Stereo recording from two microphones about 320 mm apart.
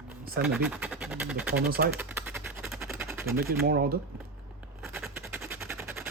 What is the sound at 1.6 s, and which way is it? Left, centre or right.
Speech, right.